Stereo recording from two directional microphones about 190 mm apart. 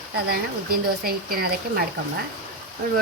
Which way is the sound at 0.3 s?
50° right (ahead or behind).